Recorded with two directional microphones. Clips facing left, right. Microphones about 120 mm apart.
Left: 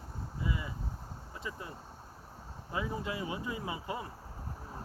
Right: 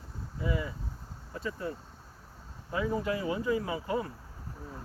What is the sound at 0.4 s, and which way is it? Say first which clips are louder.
Speech: right 5 dB; 20° left (ahead or behind).